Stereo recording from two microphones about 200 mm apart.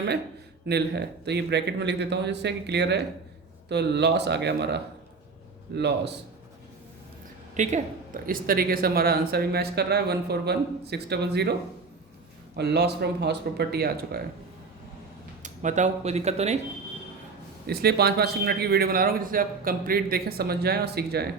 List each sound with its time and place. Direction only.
0.7 s speech: 55° right (ahead or behind)
7.5 s speech: 35° right (ahead or behind); by 11.5 s 55° right (ahead or behind)
12.5 s speech: 55° right (ahead or behind)
15.4 s speech: 35° right (ahead or behind)
17.7 s speech: 50° right (ahead or behind)